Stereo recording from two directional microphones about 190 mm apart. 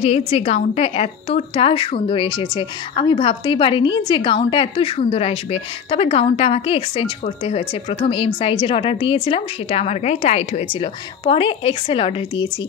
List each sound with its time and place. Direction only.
0.0 s a woman's voice: 30° left (ahead or behind)